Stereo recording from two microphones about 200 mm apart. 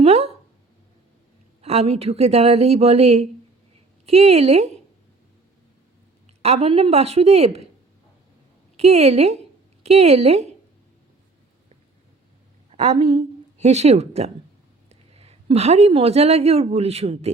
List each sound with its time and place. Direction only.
0.0 s a sound: 30° right (ahead or behind)
1.6 s a woman's voice: 30° right (ahead or behind)
6.2 s a woman's voice: 30° right (ahead or behind)
8.7 s a woman's voice: 30° right (ahead or behind)
12.7 s a woman's voice: 30° right (ahead or behind)